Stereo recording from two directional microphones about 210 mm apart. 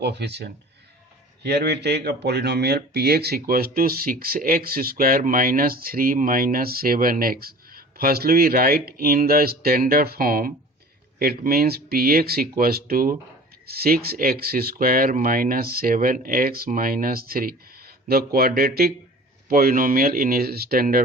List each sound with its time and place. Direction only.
0.0 s speech: 55° right (ahead or behind)